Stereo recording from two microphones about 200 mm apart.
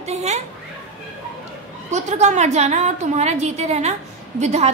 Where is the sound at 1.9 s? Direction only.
35° right (ahead or behind).